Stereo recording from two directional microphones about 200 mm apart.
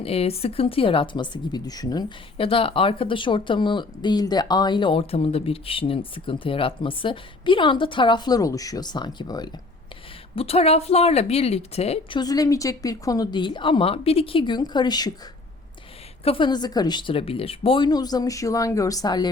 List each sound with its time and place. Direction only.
0.0 s a woman's voice: 30° left (ahead or behind)
12.2 s speech: 20° left (ahead or behind)
16.2 s speech: 25° left (ahead or behind)